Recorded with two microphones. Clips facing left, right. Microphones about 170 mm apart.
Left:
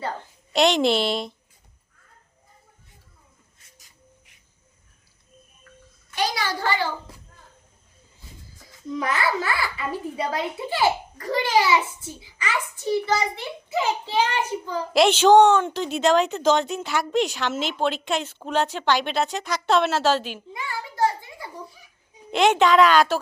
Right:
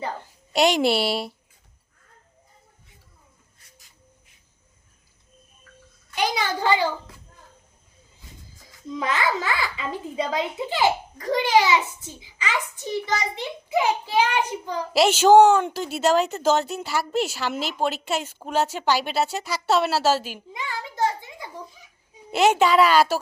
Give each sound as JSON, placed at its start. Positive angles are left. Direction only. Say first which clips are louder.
{"t": 0.0, "sound": "a woman's voice", "louder": "even", "side_deg": -10}
{"t": 6.1, "sound": "a child's voice", "louder": "right 1 dB", "side_deg": -15}
{"t": 8.9, "sound": "a child's voice", "louder": "even", "side_deg": -20}
{"t": 20.5, "sound": "a child's voice", "louder": "right 2 dB", "side_deg": -20}
{"t": 22.3, "sound": "a child's voice", "louder": "even", "side_deg": -5}